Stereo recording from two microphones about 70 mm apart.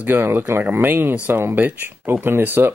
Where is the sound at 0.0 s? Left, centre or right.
Right.